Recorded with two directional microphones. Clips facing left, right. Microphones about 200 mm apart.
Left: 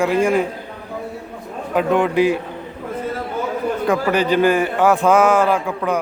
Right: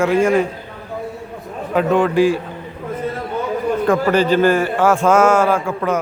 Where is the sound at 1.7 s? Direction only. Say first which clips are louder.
Right 1 dB; 10° left (ahead or behind).